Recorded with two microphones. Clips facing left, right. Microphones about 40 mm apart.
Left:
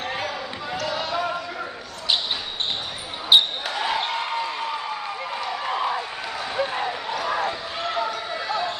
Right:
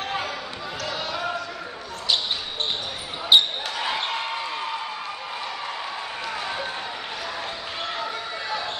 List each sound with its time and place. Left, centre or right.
0.7 s basketball bounce: centre
3.3 s basketball bounce: centre
7.2 s a sound: left